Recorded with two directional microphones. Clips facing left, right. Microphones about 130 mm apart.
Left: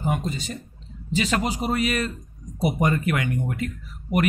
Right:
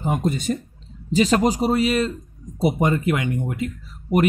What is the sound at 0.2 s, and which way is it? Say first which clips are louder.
Speech: right 8 dB; 50° right (ahead or behind).